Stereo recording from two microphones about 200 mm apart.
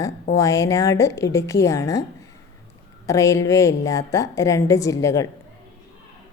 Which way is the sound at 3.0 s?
15° left (ahead or behind).